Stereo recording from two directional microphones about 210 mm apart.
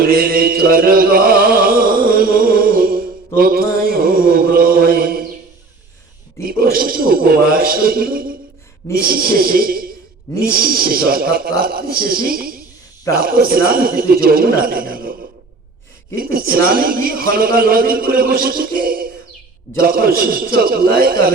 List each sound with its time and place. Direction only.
0.0 s mantra: 45° right (ahead or behind)
6.4 s a man's voice: 45° right (ahead or behind)
16.1 s a man's voice: 45° right (ahead or behind)